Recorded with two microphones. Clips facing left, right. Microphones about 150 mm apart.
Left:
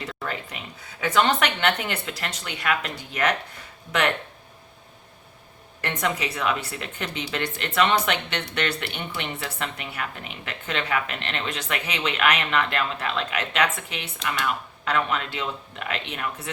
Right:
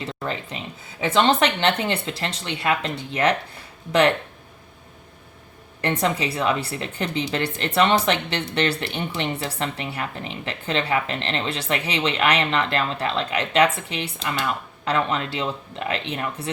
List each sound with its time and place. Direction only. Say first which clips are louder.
0.1 s speech: right 3 dB; 25° right (ahead or behind)
5.8 s speech: right 4 dB; 30° right (ahead or behind)